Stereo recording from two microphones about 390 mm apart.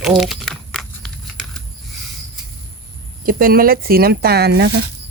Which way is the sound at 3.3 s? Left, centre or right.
Right.